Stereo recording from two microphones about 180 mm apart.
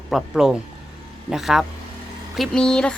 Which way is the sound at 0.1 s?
Centre (ahead or behind).